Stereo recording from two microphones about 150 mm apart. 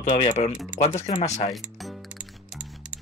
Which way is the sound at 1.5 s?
Centre (ahead or behind).